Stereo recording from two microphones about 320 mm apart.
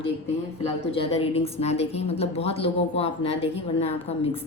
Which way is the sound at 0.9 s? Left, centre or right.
Centre.